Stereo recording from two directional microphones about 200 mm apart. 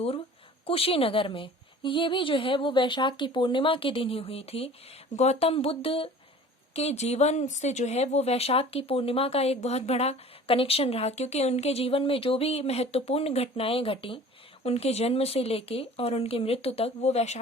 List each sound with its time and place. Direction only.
0.7 s a woman's voice: 30° left (ahead or behind)